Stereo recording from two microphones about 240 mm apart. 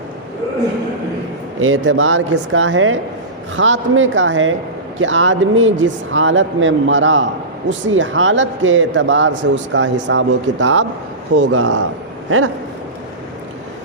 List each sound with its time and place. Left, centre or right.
1.6 s a man's voice: right
11.3 s speech: right